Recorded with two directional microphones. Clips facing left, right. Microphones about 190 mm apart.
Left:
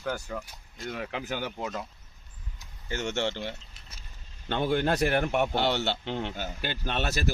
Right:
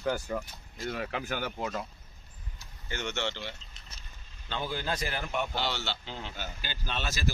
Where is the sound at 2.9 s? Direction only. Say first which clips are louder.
Left 4 dB; 45° left (ahead or behind).